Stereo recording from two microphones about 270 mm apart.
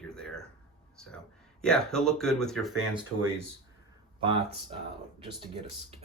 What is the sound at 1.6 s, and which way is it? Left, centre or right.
Speech, centre.